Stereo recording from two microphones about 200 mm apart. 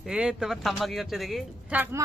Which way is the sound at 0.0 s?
5° right (ahead or behind).